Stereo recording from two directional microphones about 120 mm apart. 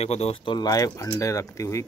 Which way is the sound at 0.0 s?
60° left (ahead or behind).